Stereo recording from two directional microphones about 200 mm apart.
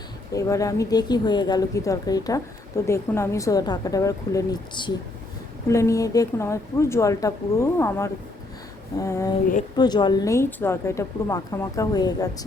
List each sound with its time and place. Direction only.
0.3 s a woman's voice: 15° left (ahead or behind)